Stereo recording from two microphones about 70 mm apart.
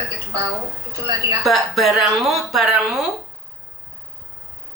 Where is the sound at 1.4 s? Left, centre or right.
Centre.